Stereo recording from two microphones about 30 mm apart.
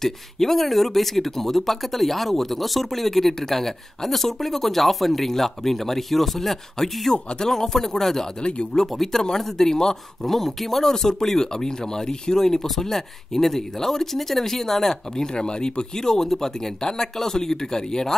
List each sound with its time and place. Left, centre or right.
0.0 s speech: centre
8.4 s speech: left
8.8 s speech: centre
10.9 s speech: centre
15.4 s speech: left